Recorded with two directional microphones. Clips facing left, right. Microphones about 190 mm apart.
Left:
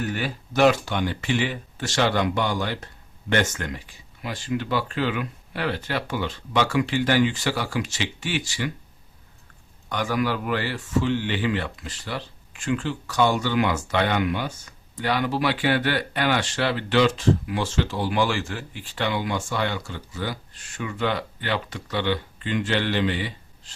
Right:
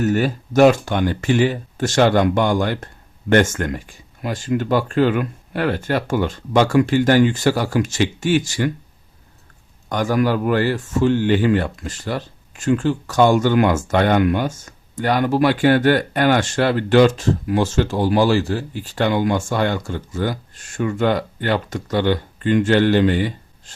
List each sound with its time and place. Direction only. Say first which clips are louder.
0.0 s speech: right 10 dB; 45° right (ahead or behind)
9.9 s speech: right 6 dB; 45° right (ahead or behind)